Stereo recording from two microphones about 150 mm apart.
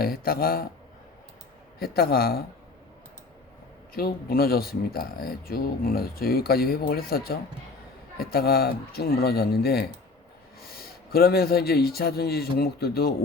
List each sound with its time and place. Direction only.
0.0 s speech: 85° left
1.8 s speech: 90° left
3.9 s speech: 90° left